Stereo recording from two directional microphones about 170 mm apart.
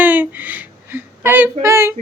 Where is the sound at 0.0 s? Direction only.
10° right (ahead or behind).